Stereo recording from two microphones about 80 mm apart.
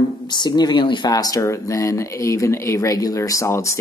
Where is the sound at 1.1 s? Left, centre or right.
Left.